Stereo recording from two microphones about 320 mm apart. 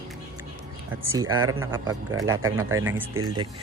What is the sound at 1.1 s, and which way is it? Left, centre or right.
Speech, centre.